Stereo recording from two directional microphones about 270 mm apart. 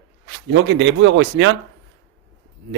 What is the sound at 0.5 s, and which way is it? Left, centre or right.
Speech, right.